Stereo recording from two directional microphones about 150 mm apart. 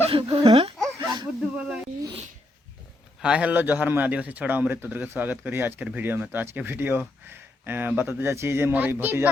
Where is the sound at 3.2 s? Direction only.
5° right (ahead or behind).